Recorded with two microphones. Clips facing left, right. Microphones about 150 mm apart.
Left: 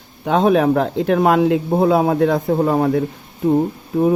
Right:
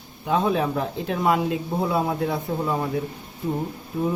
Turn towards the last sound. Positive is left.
turn(degrees=70)  # may be behind; listen again after turning